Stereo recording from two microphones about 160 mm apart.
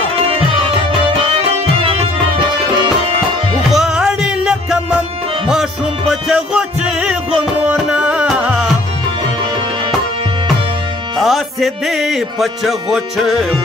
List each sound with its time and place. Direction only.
1.8 s music: 35° right (ahead or behind)
3.7 s music: 5° right (ahead or behind)
6.2 s music: 5° right (ahead or behind)
11.1 s music: centre (ahead or behind)